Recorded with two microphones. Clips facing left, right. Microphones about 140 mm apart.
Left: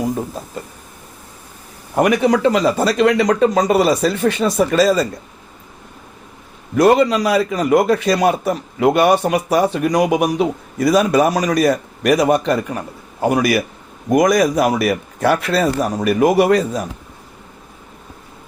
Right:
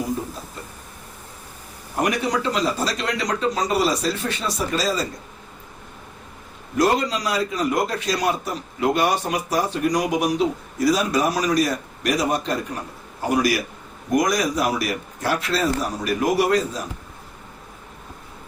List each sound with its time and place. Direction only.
2.0 s a man's voice: 60° left (ahead or behind)
6.7 s a man's voice: 60° left (ahead or behind)